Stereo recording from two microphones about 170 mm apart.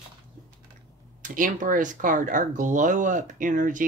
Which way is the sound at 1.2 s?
50° right (ahead or behind).